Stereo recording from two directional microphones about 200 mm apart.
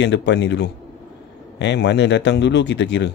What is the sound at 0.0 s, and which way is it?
Speech, 60° left (ahead or behind).